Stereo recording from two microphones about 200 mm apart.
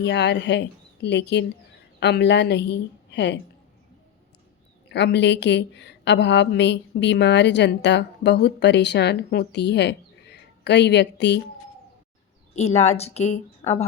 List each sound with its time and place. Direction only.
0.0 s a woman's voice: 60° left (ahead or behind)
4.9 s a woman's voice: 60° left (ahead or behind)
12.5 s a woman's voice: 35° left (ahead or behind)